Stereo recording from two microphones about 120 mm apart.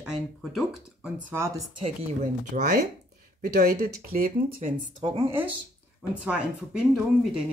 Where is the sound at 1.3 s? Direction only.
20° right (ahead or behind).